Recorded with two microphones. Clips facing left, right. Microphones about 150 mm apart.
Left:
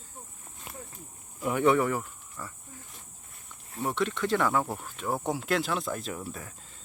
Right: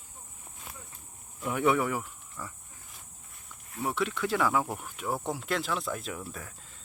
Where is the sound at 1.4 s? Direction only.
5° left (ahead or behind).